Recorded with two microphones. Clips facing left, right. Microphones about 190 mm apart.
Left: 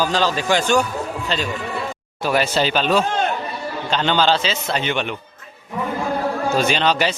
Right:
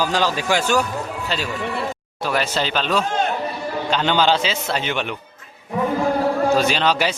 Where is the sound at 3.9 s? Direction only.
10° right (ahead or behind).